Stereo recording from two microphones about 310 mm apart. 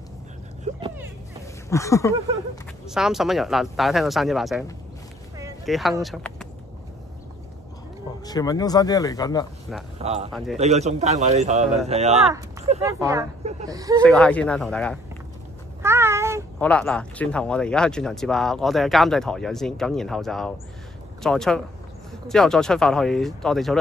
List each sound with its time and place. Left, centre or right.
1.7 s speech: centre
2.9 s speech: centre
5.4 s a sound: centre
6.0 s speech: centre
8.3 s speech: centre
9.9 s a man's voice: centre
10.3 s speech: centre
10.6 s a man's voice: right
14.0 s speech: centre
15.8 s a sound: centre
16.5 s speech: centre